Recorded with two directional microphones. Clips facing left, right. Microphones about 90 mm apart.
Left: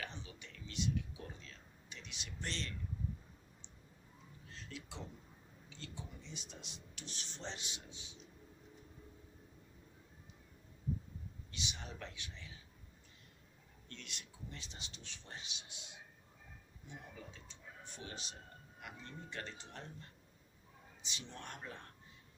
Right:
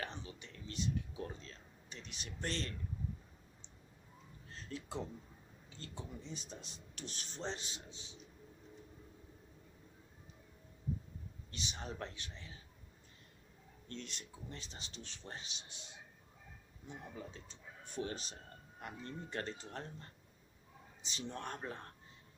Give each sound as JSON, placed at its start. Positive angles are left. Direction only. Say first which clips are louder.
{"t": 0.0, "sound": "a sound", "louder": "right 3 dB", "side_deg": -35}
{"t": 4.4, "sound": "a sound", "louder": "right 5 dB", "side_deg": -40}
{"t": 5.6, "sound": "speech", "louder": "right 2 dB", "side_deg": -40}
{"t": 11.5, "sound": "speech", "louder": "right 3 dB", "side_deg": -40}
{"t": 13.8, "sound": "speech", "louder": "right 5 dB", "side_deg": -35}
{"t": 17.2, "sound": "speech", "louder": "right 4 dB", "side_deg": -40}